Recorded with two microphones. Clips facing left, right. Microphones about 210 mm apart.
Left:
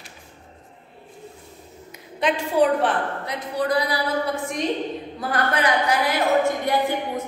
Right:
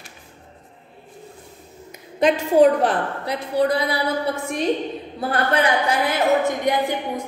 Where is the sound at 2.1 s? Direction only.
45° right (ahead or behind); by 4.0 s 25° right (ahead or behind).